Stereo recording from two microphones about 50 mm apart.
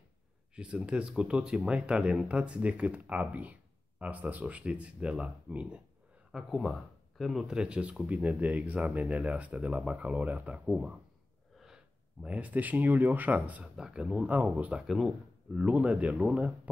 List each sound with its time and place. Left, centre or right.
0.6 s speech: right
6.5 s speech: centre; by 11.0 s right
11.6 s gasp: centre
12.3 s speech: right
13.7 s speech: centre
14.9 s speech: centre
15.6 s speech: right